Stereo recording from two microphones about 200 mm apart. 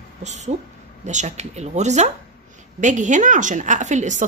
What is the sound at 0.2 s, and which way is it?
A woman's voice, 35° right (ahead or behind).